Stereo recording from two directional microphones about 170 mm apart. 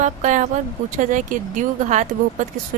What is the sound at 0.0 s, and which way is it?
Speech, 45° right (ahead or behind).